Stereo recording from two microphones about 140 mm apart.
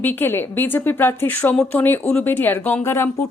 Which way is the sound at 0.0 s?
15° left (ahead or behind).